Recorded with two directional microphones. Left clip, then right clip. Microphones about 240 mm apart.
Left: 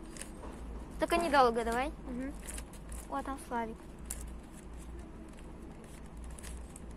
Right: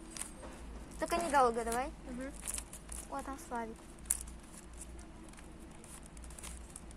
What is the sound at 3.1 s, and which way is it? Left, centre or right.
Speech, centre.